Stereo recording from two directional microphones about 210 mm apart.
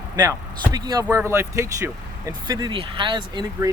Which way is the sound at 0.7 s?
20° right (ahead or behind).